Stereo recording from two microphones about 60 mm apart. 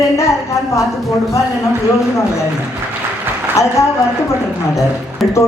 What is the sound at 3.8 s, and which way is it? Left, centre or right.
Speech, left.